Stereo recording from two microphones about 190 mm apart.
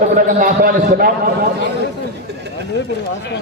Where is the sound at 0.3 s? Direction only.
45° right (ahead or behind).